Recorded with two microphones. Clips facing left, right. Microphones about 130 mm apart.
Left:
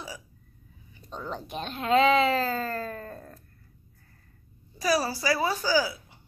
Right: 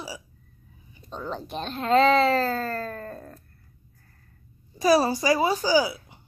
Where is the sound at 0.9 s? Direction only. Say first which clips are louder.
Right 3 dB; 20° right (ahead or behind).